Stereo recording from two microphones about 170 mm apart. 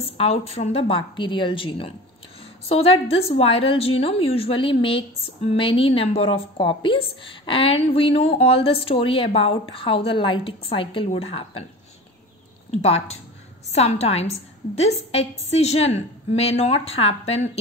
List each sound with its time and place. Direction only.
0.0 s a woman's voice: 35° left (ahead or behind)
12.7 s a woman's voice: 40° left (ahead or behind)